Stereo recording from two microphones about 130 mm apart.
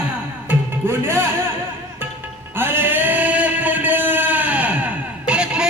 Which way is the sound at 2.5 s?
15° right (ahead or behind).